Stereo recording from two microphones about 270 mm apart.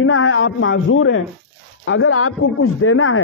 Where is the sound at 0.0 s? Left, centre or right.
Left.